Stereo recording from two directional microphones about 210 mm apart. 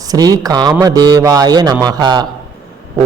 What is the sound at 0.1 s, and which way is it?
A man's voice, 20° right (ahead or behind).